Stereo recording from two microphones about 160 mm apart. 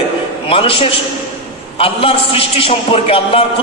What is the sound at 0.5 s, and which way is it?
A man's voice, 35° left (ahead or behind).